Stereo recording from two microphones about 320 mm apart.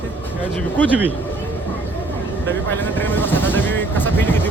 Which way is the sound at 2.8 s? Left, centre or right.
Centre.